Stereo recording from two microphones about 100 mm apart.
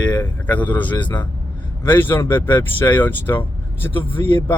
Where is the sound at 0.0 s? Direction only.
15° left (ahead or behind).